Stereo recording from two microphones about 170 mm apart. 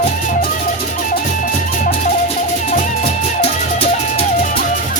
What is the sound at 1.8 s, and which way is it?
Music, 45° left (ahead or behind).